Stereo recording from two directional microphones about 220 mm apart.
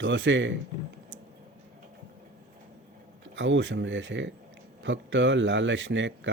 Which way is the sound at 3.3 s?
55° right (ahead or behind).